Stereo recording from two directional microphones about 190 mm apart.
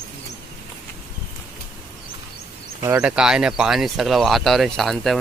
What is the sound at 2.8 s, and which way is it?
Speech, 15° right (ahead or behind).